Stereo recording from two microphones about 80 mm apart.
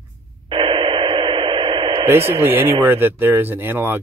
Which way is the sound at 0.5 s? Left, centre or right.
Right.